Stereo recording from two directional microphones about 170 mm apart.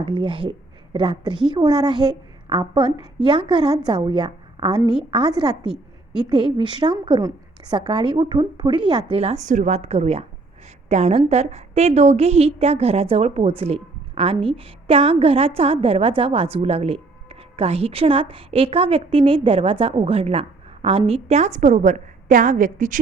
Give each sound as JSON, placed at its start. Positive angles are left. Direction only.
{"t": 0.0, "sound": "a woman's voice", "side_deg": -30}